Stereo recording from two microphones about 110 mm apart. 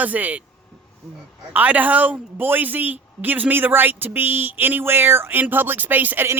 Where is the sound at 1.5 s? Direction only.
15° right (ahead or behind).